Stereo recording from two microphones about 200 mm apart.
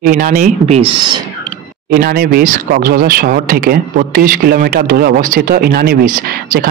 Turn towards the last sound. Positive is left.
turn(degrees=-45)  # may be behind; listen again after turning